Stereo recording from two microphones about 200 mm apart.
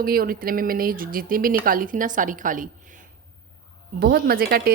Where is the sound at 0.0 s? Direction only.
45° right (ahead or behind).